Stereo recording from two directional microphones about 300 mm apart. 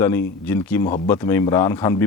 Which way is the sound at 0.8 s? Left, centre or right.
Left.